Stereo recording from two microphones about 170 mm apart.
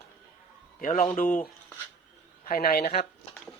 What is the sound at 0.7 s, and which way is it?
Speech, 45° left (ahead or behind).